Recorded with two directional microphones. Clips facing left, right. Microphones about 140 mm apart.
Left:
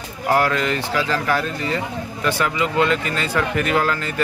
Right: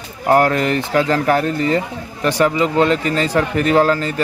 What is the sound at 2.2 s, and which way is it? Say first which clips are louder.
Speech: right 6 dB; 35° right (ahead or behind).